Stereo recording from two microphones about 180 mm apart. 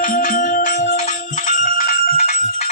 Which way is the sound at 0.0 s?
50° left (ahead or behind).